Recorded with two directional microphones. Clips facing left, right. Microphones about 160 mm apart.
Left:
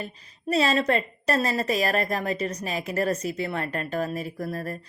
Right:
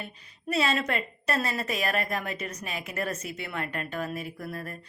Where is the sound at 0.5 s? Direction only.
35° left (ahead or behind).